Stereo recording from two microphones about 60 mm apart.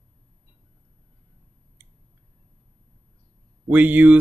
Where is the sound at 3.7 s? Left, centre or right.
Right.